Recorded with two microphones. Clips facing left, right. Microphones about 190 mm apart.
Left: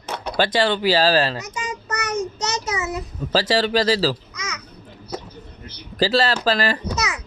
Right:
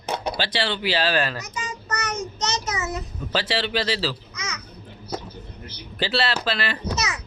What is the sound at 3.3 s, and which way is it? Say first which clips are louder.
Speech: left 6 dB; 40° left (ahead or behind).